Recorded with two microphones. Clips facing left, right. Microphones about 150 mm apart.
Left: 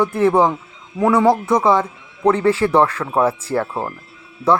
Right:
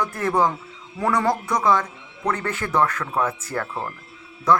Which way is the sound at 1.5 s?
25° left (ahead or behind).